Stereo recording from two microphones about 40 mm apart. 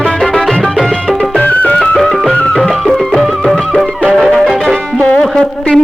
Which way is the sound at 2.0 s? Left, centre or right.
Centre.